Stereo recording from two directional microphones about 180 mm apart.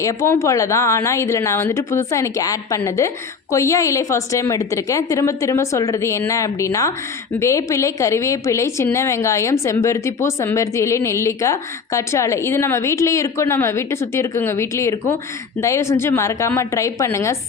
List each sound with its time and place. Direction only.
0.0 s a woman's voice: 15° left (ahead or behind)